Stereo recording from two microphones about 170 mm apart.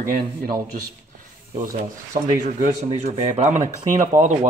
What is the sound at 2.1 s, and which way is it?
Speech, 50° right (ahead or behind).